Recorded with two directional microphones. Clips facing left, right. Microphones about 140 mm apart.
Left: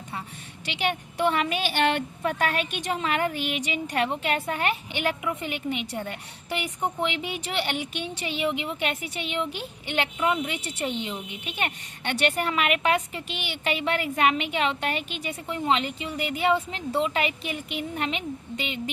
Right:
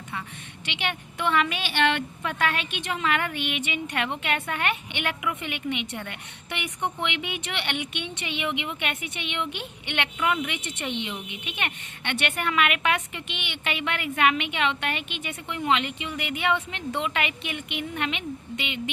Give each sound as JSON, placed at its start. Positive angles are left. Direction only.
{"t": 0.6, "sound": "a woman's voice", "side_deg": 40}